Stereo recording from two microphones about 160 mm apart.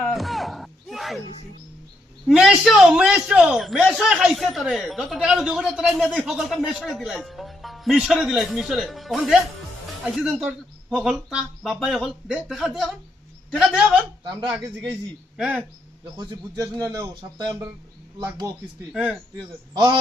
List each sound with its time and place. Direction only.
0.1 s a sound: centre (ahead or behind)
2.2 s a man's voice: 5° right (ahead or behind)
15.4 s speech: 5° right (ahead or behind)
16.1 s speech: 25° right (ahead or behind)
19.7 s speech: 30° right (ahead or behind)